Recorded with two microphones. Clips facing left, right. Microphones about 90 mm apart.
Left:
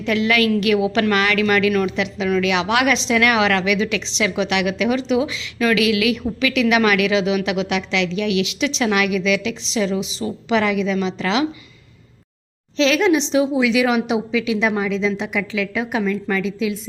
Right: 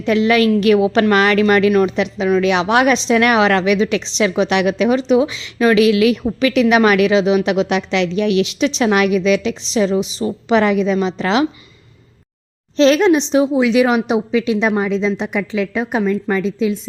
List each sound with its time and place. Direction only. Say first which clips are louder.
0.0 s a woman's voice: right 5 dB; 30° right (ahead or behind)
12.7 s a woman's voice: right 5 dB; 40° right (ahead or behind)